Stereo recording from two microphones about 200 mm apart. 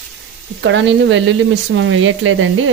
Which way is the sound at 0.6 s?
65° right (ahead or behind).